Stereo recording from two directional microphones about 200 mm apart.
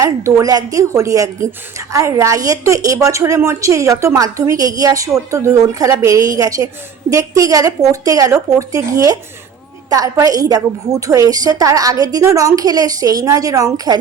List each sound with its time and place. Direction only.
0.0 s a woman's voice: 15° right (ahead or behind)